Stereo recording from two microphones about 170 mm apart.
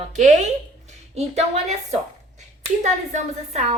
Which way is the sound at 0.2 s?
45° right (ahead or behind).